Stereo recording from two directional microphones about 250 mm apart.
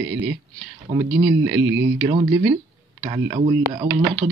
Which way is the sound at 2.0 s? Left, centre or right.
Centre.